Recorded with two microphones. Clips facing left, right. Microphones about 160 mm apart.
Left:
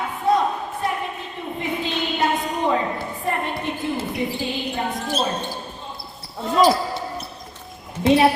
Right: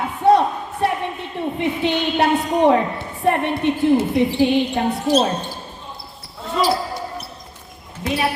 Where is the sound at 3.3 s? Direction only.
70° right (ahead or behind).